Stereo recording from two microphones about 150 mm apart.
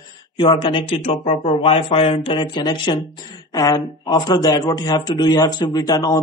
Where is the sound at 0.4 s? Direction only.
30° left (ahead or behind).